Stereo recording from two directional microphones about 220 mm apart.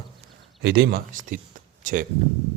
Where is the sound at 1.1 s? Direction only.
35° right (ahead or behind).